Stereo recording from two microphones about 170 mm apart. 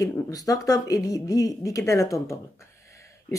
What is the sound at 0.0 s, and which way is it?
Speech, 20° left (ahead or behind).